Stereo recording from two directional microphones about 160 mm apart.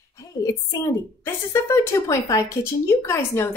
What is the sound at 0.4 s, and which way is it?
A woman's voice, 20° left (ahead or behind).